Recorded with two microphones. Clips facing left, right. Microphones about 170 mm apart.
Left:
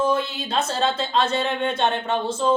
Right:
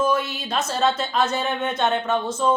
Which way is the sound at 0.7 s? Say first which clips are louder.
Right 3 dB; 30° left (ahead or behind).